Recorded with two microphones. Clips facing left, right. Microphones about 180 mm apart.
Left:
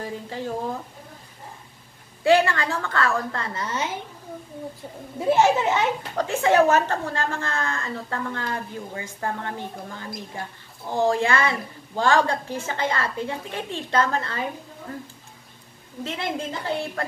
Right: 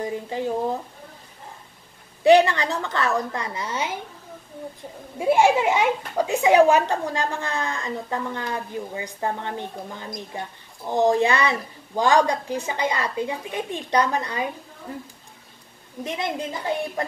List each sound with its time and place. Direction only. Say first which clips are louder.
0.0 s speech: right 4 dB; 20° right (ahead or behind)
2.2 s a woman's voice: right 3 dB; 20° right (ahead or behind)
5.2 s a woman's voice: right 1 dB; 10° right (ahead or behind)
16.0 s a woman's voice: right 1 dB; 15° right (ahead or behind)